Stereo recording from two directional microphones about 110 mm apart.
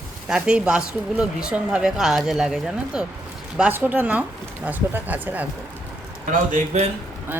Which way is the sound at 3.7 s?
15° right (ahead or behind).